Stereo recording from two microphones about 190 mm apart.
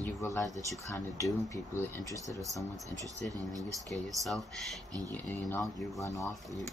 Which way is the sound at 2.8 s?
15° right (ahead or behind).